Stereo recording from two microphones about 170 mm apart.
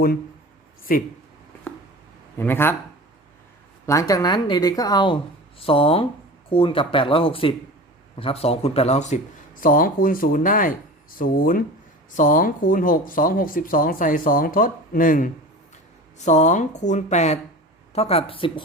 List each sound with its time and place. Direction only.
0.9 s speech: 55° left (ahead or behind)
2.4 s speech: 15° left (ahead or behind)
3.8 s a woman's voice: 20° left (ahead or behind); by 9.1 s 40° left (ahead or behind)
9.6 s speech: 55° left (ahead or behind); by 18.6 s 30° left (ahead or behind)